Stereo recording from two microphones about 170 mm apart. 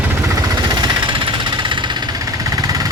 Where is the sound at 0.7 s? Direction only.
25° right (ahead or behind).